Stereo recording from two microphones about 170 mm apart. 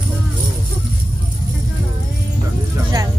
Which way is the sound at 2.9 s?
25° right (ahead or behind).